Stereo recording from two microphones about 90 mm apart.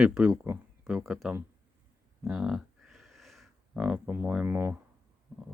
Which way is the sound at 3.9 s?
25° right (ahead or behind).